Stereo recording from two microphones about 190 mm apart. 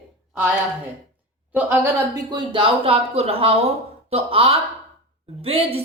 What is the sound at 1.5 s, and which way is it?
A woman's voice, 10° right (ahead or behind).